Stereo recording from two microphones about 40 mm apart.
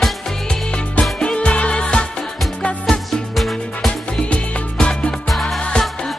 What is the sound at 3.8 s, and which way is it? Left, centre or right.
Music, left.